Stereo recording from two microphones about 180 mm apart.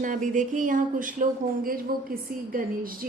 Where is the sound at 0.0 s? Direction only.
45° right (ahead or behind).